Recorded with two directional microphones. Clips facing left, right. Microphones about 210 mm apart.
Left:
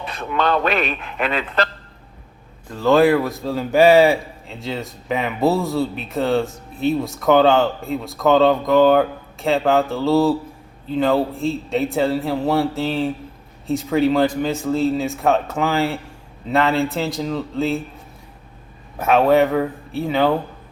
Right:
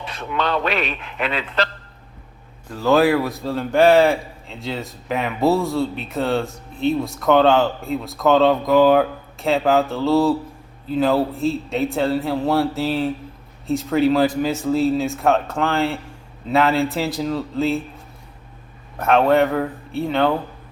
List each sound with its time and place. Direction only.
0.0 s speech: 50° left (ahead or behind)
2.6 s a man's voice: centre (ahead or behind)
18.9 s a man's voice: 5° left (ahead or behind)